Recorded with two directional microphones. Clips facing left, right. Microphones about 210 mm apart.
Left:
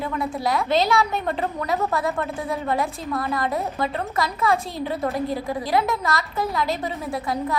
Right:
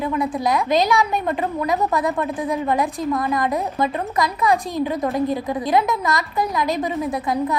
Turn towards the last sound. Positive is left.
turn(degrees=-20)  # may be behind; listen again after turning